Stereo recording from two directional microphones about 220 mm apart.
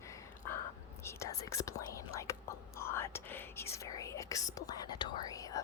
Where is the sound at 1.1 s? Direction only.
15° left (ahead or behind).